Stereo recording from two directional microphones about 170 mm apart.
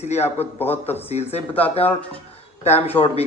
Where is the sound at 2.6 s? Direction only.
40° left (ahead or behind).